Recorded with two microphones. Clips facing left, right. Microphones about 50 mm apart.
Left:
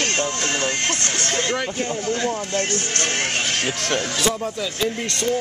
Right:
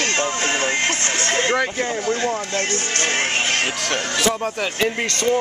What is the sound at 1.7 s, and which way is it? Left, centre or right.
Speech, right.